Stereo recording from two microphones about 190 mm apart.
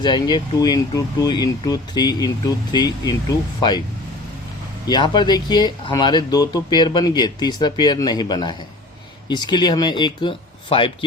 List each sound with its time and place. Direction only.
0.0 s speech: 25° left (ahead or behind)
4.9 s speech: 25° left (ahead or behind)